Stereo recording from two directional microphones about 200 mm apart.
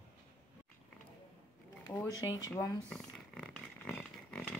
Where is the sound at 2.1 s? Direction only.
20° left (ahead or behind).